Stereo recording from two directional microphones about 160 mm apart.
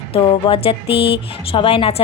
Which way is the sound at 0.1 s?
35° left (ahead or behind).